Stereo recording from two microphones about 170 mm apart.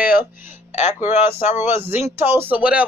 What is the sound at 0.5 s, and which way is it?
Music, 40° left (ahead or behind).